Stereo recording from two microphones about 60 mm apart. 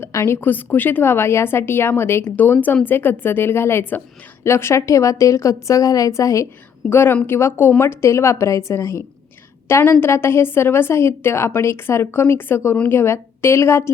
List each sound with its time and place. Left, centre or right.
0.3 s a woman's voice: left
2.3 s a woman's voice: left
6.9 s a woman's voice: left
9.6 s a woman's voice: left